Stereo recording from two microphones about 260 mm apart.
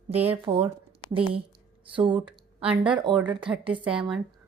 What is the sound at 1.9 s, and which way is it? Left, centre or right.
Speech, centre.